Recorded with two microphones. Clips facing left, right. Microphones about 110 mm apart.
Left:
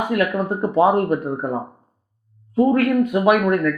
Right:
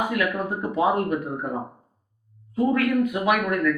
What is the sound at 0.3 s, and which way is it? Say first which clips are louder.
Speech: left 7 dB; 35° left (ahead or behind).